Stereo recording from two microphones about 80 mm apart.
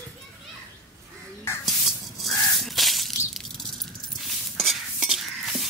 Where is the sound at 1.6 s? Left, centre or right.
Centre.